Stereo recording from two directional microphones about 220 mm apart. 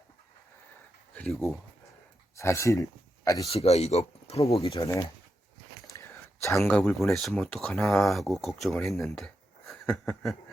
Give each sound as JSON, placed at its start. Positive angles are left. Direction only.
{"t": 1.1, "sound": "speech", "side_deg": 0}
{"t": 2.3, "sound": "speech", "side_deg": 15}
{"t": 3.5, "sound": "speech", "side_deg": 30}
{"t": 4.8, "sound": "speech", "side_deg": 15}
{"t": 6.0, "sound": "whispering", "side_deg": 10}
{"t": 6.6, "sound": "speech", "side_deg": 5}